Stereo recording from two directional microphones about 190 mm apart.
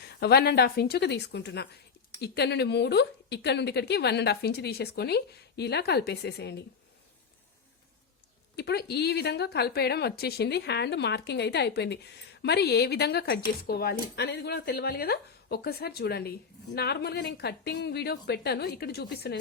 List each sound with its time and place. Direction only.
0.0 s a woman's voice: 60° left (ahead or behind)
8.5 s a woman's voice: 60° left (ahead or behind)